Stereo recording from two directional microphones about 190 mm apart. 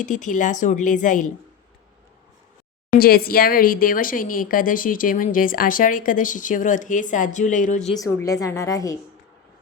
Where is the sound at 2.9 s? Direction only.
50° left (ahead or behind).